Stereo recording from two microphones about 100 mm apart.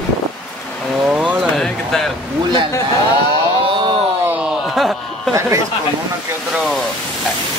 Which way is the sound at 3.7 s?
55° right (ahead or behind).